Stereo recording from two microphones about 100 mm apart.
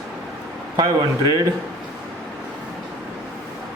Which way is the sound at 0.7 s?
40° right (ahead or behind).